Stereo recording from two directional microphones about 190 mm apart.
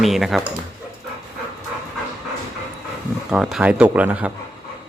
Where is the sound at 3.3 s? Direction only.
Centre (ahead or behind).